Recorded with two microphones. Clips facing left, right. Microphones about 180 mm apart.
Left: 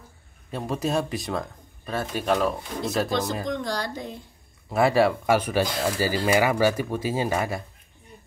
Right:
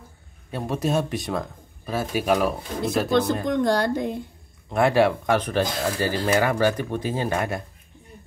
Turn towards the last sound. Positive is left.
turn(degrees=0)  # may be behind; listen again after turning